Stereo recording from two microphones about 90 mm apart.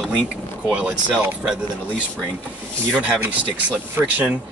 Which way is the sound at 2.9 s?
10° right (ahead or behind).